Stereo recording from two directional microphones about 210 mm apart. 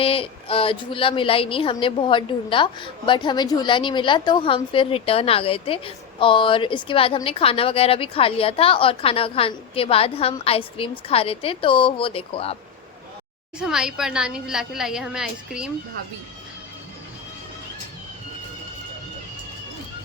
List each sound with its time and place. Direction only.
0.0 s a woman's voice: 25° left (ahead or behind)
13.6 s a woman's voice: 5° right (ahead or behind)